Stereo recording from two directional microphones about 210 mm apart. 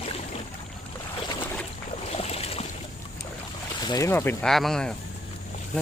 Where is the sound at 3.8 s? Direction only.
15° left (ahead or behind).